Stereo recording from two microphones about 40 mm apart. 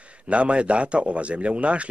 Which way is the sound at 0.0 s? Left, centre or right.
Right.